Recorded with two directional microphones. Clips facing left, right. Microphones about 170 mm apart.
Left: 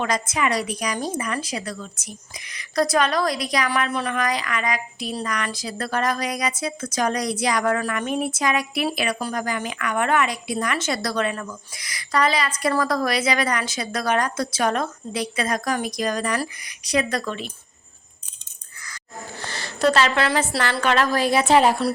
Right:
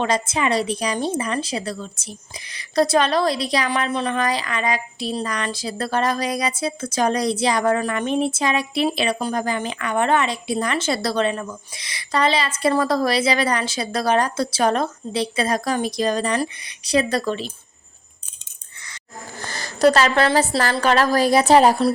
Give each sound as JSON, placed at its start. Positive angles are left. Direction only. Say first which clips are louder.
{"t": 0.0, "sound": "a woman's voice", "louder": "right 2 dB", "side_deg": -30}
{"t": 19.4, "sound": "a sound", "louder": "right 5 dB", "side_deg": -45}
{"t": 20.8, "sound": "a woman's voice", "louder": "right 3 dB", "side_deg": -35}